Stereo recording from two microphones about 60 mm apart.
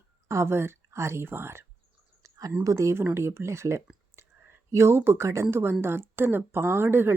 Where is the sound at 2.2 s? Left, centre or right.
Right.